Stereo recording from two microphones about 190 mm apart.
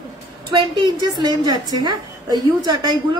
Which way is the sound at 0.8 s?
20° right (ahead or behind).